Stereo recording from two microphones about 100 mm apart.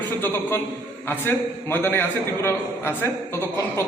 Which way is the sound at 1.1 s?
20° left (ahead or behind).